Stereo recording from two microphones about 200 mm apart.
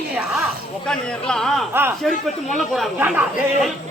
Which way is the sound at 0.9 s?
5° left (ahead or behind).